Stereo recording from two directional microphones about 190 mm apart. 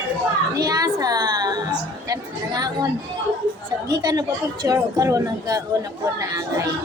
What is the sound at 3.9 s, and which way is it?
Speech, 20° right (ahead or behind).